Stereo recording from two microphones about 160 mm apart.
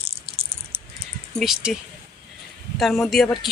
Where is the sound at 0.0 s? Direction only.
35° right (ahead or behind).